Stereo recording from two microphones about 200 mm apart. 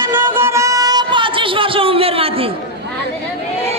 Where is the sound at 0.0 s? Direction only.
10° right (ahead or behind); by 2.2 s 30° right (ahead or behind).